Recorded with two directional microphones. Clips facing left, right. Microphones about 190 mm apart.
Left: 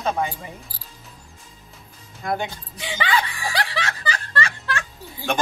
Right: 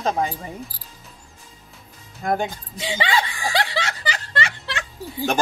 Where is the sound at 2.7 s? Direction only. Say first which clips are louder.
Right 1 dB; 25° right (ahead or behind).